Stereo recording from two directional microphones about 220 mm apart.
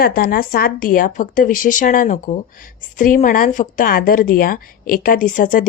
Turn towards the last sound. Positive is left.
turn(degrees=35)  # may be behind; listen again after turning